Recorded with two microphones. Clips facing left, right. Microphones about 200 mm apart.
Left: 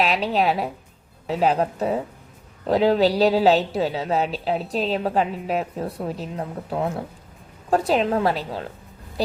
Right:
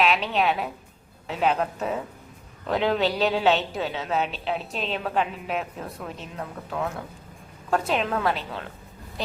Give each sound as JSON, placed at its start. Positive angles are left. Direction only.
{"t": 0.0, "sound": "a woman's voice", "side_deg": 35}